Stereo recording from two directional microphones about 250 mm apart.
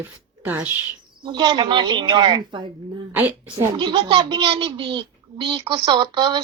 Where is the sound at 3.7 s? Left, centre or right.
Centre.